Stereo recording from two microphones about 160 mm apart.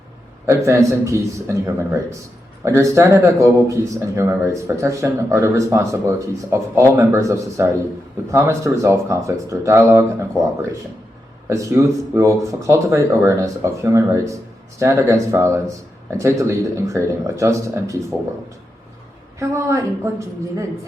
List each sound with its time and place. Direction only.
0.4 s a man's voice: 20° right (ahead or behind)
19.4 s speech: 20° right (ahead or behind)